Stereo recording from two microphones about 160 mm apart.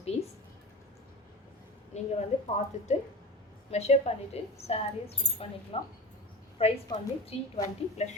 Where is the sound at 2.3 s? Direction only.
45° left (ahead or behind).